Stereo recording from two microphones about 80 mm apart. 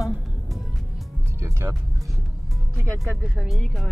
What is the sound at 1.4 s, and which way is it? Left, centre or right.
Music, right.